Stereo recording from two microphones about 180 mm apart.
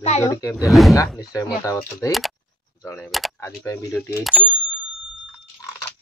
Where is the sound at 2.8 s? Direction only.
10° left (ahead or behind).